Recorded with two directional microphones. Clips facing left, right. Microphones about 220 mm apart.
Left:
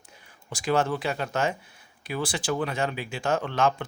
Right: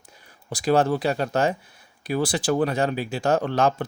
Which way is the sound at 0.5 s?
35° right (ahead or behind).